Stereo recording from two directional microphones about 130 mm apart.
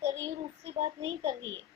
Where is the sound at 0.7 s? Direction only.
45° right (ahead or behind).